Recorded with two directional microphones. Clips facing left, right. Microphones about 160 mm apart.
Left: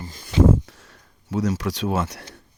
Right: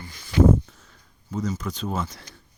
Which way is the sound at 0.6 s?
80° left.